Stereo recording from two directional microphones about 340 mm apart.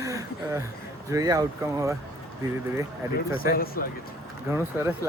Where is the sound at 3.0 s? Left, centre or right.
Centre.